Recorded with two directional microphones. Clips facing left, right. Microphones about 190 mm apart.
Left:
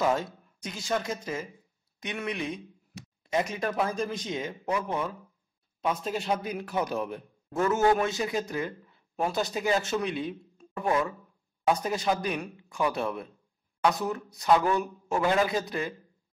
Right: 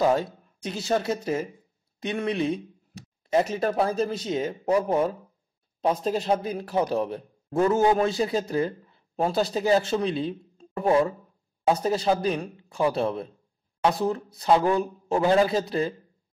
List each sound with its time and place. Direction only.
0.0 s speech: 35° right (ahead or behind)